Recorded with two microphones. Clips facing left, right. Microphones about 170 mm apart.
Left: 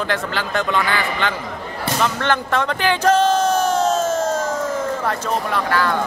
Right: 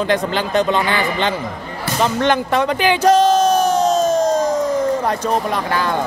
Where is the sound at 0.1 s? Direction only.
20° right (ahead or behind).